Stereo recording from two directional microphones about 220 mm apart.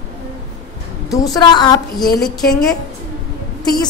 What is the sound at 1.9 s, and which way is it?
Speech, centre (ahead or behind).